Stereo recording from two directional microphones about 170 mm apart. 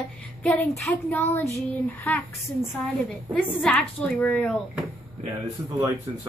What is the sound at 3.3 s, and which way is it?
A woman's voice, 10° left (ahead or behind).